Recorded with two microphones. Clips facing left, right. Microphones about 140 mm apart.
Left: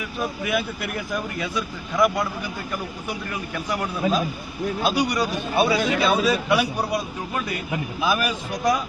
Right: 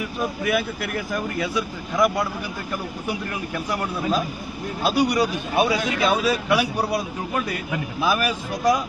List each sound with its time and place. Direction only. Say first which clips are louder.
0.4 s speech: right 3 dB; centre (ahead or behind)
3.7 s speech: left 1 dB; 5° left (ahead or behind)
4.8 s a man's voice: right 3 dB; 5° right (ahead or behind)
8.0 s speech: right 1 dB; centre (ahead or behind)